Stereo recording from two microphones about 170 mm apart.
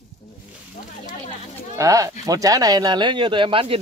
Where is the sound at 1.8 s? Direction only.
20° right (ahead or behind).